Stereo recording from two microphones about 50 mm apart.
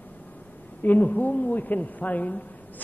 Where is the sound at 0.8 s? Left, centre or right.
Left.